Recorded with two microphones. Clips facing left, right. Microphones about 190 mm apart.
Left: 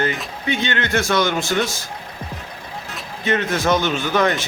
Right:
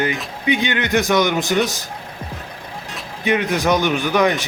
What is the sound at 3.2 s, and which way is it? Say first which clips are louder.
A man's voice: right 1 dB; 15° right (ahead or behind).